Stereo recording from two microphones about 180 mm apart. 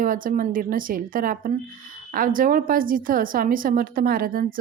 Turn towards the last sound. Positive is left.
turn(degrees=-50)  # may be behind; listen again after turning